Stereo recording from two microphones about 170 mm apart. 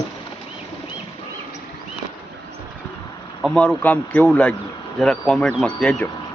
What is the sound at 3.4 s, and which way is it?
A man's voice, 5° left (ahead or behind).